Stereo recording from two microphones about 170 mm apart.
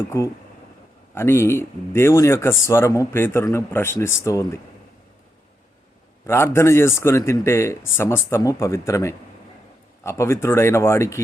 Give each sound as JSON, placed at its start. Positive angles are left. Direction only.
{"t": 0.1, "sound": "speech", "side_deg": 15}
{"t": 6.2, "sound": "speech", "side_deg": 15}